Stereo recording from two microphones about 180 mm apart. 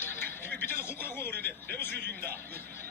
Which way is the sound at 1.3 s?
60° right (ahead or behind).